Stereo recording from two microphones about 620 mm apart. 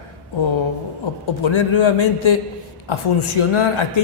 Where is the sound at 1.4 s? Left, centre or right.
Left.